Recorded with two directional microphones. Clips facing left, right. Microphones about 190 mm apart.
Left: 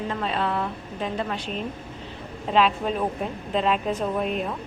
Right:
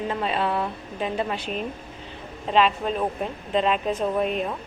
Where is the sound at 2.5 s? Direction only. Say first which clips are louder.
Even; centre (ahead or behind).